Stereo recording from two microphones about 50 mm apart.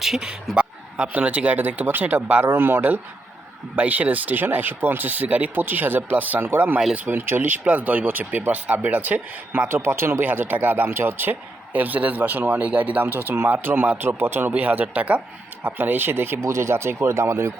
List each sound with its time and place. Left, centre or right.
0.0 s a man's voice: centre; by 2.9 s right
3.8 s speech: right
7.6 s speech: right
9.6 s speech: right
10.2 s speech: right
10.8 s speech: right
14.5 s speech: right
15.6 s speech: right
16.4 s speech: right